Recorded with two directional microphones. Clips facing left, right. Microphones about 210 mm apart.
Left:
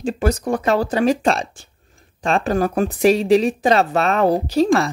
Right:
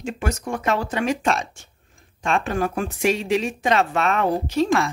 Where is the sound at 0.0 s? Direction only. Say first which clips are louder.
Left 7 dB; 35° left (ahead or behind).